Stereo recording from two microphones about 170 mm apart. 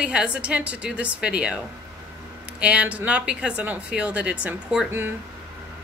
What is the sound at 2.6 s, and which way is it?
A woman's voice, 5° right (ahead or behind).